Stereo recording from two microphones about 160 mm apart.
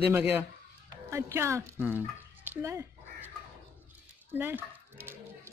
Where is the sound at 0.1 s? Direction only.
10° right (ahead or behind).